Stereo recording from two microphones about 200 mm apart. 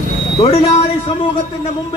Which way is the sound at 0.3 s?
25° left (ahead or behind).